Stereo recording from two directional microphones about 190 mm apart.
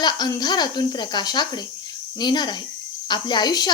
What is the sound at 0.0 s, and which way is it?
A woman's voice, 20° left (ahead or behind).